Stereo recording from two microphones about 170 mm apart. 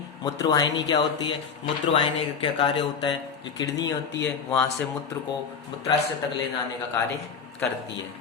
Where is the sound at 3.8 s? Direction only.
90° left.